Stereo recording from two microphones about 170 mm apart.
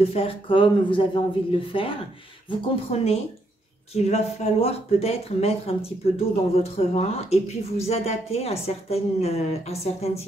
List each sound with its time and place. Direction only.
0.1 s speech: 35° left (ahead or behind)